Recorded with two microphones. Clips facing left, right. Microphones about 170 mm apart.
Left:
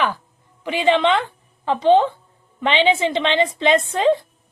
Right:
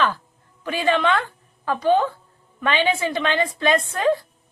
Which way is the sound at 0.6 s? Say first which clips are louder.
Left 3 dB; 20° left (ahead or behind).